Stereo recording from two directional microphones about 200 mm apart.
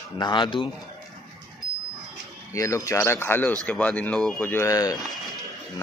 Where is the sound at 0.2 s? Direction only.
25° left (ahead or behind).